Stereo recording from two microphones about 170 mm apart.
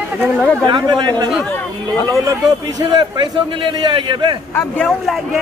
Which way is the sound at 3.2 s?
25° right (ahead or behind).